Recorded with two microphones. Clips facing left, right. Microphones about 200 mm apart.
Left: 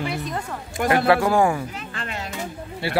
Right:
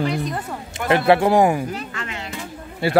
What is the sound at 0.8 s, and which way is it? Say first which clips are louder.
Speech: right 2 dB; 25° right (ahead or behind).